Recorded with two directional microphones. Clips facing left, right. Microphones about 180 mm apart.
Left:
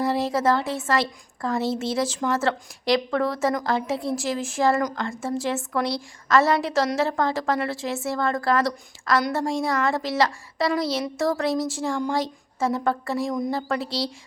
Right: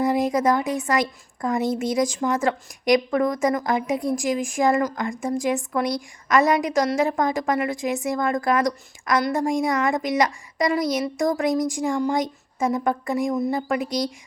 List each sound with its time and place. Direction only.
0.0 s a woman's voice: 15° right (ahead or behind)